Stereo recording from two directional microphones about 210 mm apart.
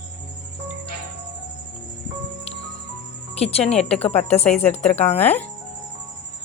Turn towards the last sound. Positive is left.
turn(degrees=30)  # may be behind; listen again after turning